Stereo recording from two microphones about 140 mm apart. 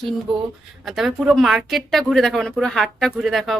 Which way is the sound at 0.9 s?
Centre (ahead or behind).